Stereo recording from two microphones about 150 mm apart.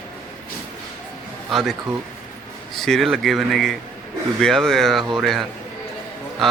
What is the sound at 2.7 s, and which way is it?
A man's voice, 5° left (ahead or behind).